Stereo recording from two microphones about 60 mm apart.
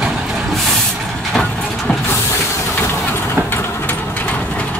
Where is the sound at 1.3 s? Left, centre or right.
Centre.